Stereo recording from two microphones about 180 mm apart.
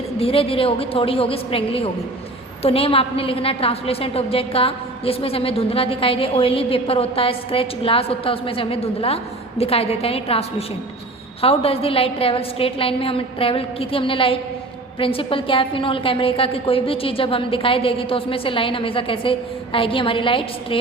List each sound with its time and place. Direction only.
0.2 s a woman's voice: 30° left (ahead or behind)